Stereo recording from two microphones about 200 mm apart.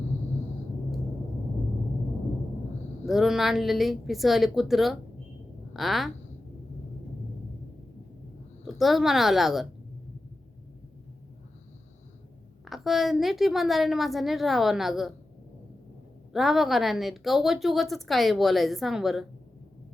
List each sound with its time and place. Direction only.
3.1 s a woman's voice: centre (ahead or behind)
8.6 s a woman's voice: centre (ahead or behind)
12.6 s a woman's voice: centre (ahead or behind)
16.3 s a woman's voice: centre (ahead or behind)